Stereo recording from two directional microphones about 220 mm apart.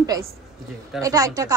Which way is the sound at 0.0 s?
15° right (ahead or behind).